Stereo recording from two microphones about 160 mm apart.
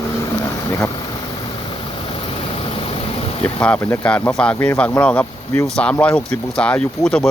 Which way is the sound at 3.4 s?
5° left (ahead or behind).